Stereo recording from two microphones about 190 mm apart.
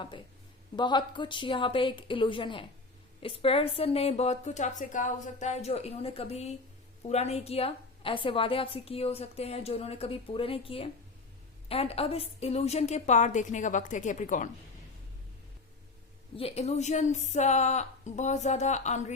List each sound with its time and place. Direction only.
0.8 s a woman's voice: 25° left (ahead or behind); by 14.5 s 40° left (ahead or behind)
16.3 s a woman's voice: 30° left (ahead or behind)